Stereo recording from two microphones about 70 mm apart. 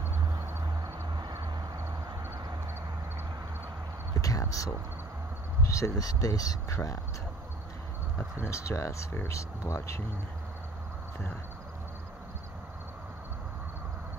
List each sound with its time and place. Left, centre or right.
1.1 s vehicle: right
4.2 s speech: left
8.5 s speech: left